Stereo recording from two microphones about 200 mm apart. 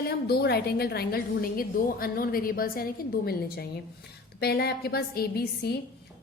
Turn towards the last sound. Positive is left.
turn(degrees=50)  # may be behind; listen again after turning